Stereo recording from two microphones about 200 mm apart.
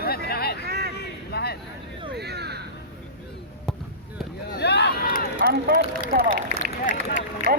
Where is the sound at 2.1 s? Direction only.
55° right (ahead or behind).